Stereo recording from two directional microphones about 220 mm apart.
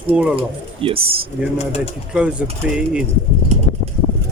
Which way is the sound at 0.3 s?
25° right (ahead or behind).